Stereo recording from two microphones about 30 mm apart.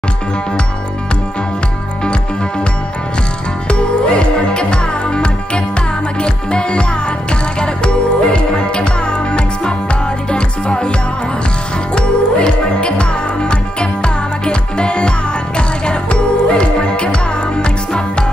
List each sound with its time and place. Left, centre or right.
3.6 s music: left
10.3 s music: left
11.9 s music: left